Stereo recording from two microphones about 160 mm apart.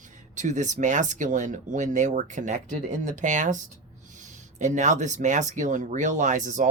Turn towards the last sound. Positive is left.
turn(degrees=-50)  # may be behind; listen again after turning